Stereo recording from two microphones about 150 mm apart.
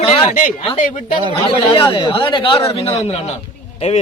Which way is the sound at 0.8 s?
60° left (ahead or behind).